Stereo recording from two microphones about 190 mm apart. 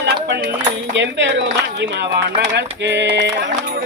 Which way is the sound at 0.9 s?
70° right (ahead or behind).